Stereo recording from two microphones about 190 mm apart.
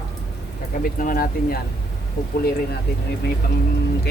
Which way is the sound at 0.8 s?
45° left (ahead or behind).